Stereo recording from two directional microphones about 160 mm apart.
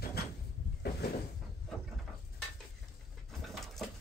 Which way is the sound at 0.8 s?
90° left.